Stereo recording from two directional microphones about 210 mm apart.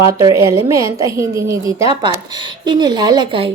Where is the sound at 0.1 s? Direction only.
15° right (ahead or behind).